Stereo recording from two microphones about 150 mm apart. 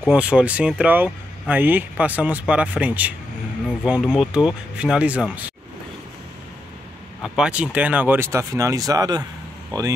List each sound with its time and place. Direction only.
0.0 s speech: 10° right (ahead or behind)
7.3 s speech: 5° right (ahead or behind); by 9.2 s 25° right (ahead or behind)